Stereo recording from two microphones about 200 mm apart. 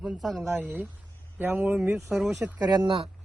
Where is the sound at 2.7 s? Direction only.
25° right (ahead or behind).